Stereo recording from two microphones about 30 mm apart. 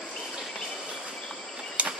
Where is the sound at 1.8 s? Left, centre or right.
Right.